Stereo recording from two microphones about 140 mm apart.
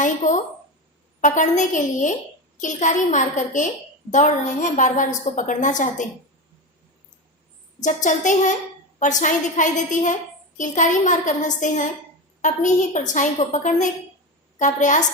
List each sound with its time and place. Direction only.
0.0 s a sound: 65° left (ahead or behind)
1.2 s a woman's voice: 65° left (ahead or behind)
7.8 s a woman's voice: 60° left (ahead or behind)